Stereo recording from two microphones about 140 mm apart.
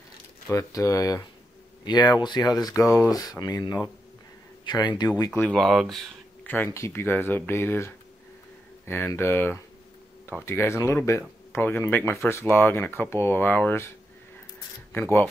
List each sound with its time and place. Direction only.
0.5 s speech: 20° left (ahead or behind)
5.3 s speech: 10° left (ahead or behind)
6.4 s speech: 15° left (ahead or behind)